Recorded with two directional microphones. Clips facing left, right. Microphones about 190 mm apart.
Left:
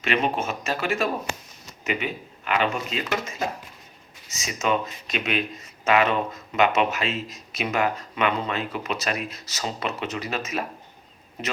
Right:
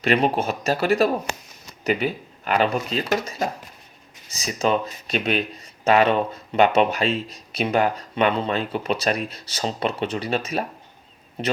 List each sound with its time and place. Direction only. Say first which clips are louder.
0.0 s speech: right 4 dB; 35° right (ahead or behind)